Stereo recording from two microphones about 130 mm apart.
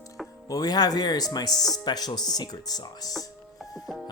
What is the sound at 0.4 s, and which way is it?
Speech, 30° left (ahead or behind).